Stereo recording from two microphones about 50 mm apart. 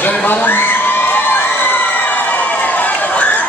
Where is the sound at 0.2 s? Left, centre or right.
Left.